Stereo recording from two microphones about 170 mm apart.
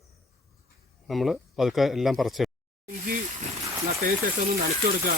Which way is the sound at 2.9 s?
55° right (ahead or behind).